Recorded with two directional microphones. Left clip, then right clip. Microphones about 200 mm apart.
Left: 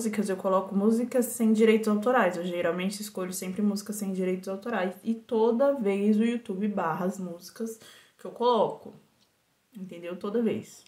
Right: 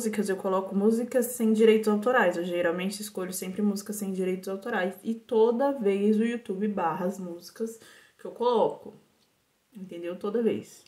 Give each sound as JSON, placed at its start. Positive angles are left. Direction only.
{"t": 0.0, "sound": "a woman's voice", "side_deg": -5}
{"t": 9.8, "sound": "a woman's voice", "side_deg": 0}